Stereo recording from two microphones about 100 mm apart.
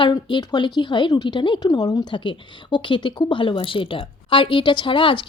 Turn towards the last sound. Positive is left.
turn(degrees=55)  # may be behind; listen again after turning